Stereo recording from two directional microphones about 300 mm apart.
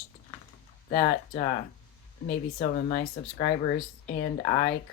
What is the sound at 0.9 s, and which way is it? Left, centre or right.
Speech, left.